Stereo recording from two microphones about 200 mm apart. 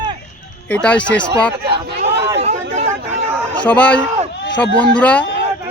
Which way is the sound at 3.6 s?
5° left (ahead or behind).